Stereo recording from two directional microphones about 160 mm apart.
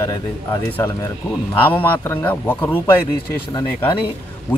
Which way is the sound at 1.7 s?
10° left (ahead or behind).